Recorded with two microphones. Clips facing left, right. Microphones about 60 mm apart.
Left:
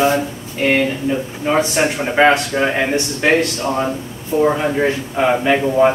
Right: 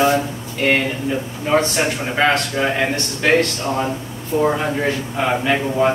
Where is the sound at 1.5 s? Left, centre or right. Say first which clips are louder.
Even; centre.